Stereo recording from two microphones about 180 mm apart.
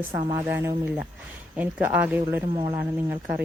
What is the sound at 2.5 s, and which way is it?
Speech, 25° right (ahead or behind).